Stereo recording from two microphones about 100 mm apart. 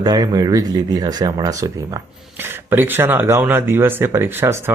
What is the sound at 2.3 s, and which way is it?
Speech, 20° right (ahead or behind).